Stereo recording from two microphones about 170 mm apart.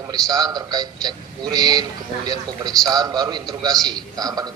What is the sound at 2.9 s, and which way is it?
A man's voice, 20° right (ahead or behind).